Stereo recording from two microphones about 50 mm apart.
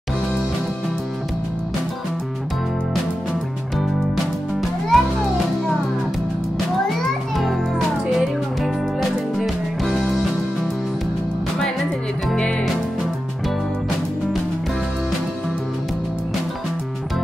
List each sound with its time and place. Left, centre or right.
4.6 s music: centre
7.3 s music: centre
9.4 s music: centre